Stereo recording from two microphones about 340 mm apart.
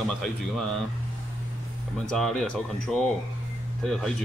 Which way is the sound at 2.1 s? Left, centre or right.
Centre.